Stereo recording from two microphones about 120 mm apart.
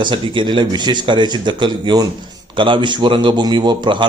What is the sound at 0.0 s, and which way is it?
A man's voice, 40° right (ahead or behind).